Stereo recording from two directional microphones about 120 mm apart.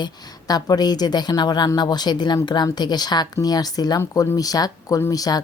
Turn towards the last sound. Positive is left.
turn(degrees=30)  # may be behind; listen again after turning